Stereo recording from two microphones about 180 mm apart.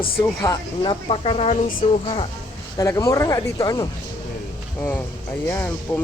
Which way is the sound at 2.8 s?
20° left (ahead or behind).